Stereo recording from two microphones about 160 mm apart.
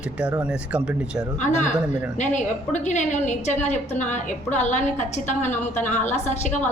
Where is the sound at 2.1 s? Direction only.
50° left (ahead or behind).